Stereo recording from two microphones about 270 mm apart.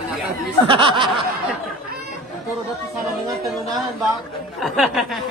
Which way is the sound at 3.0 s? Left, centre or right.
Centre.